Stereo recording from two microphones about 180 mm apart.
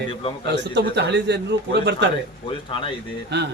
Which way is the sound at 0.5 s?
75° right (ahead or behind).